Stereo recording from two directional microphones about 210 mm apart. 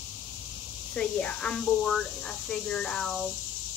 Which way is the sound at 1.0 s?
5° left (ahead or behind).